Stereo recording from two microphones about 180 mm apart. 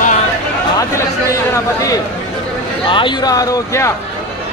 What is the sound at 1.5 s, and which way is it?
A man's voice, 20° left (ahead or behind).